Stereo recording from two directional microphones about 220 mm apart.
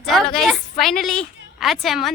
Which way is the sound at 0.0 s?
Centre (ahead or behind).